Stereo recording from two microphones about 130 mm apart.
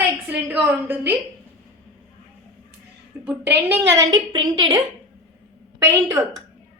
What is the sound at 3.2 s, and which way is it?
A woman's voice, 15° right (ahead or behind).